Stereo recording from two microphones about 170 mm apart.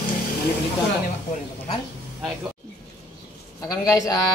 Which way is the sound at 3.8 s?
20° left (ahead or behind).